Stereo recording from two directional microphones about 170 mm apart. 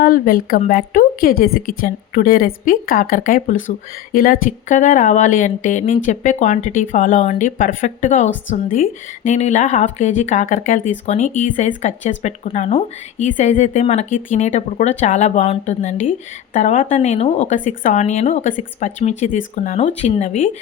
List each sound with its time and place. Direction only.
0.0 s a woman's voice: 55° left (ahead or behind); by 20.6 s 40° left (ahead or behind)